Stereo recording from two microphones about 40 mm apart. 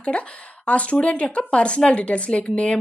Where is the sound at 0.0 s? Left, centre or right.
Left.